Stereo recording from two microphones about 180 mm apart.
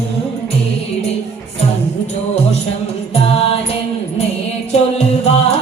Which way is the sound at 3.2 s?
35° left (ahead or behind).